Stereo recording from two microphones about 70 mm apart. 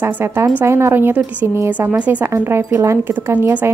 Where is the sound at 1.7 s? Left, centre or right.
Right.